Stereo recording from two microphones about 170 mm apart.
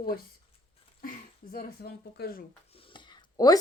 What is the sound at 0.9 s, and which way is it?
Speech, 55° left (ahead or behind).